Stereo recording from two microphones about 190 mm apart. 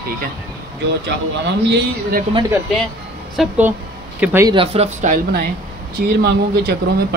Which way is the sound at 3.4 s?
10° right (ahead or behind).